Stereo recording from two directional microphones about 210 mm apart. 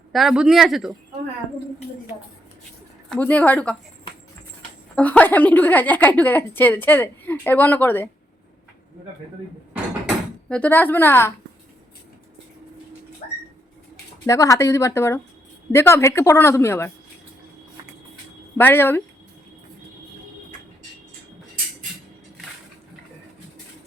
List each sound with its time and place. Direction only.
0.1 s speech: centre (ahead or behind)
3.1 s a woman's voice: 5° left (ahead or behind)
4.9 s a woman's voice: 5° left (ahead or behind)
10.5 s a woman's voice: 5° left (ahead or behind)
13.2 s vehicle: 30° left (ahead or behind)
14.3 s a woman's voice: 15° left (ahead or behind)
18.5 s a woman's voice: 10° left (ahead or behind)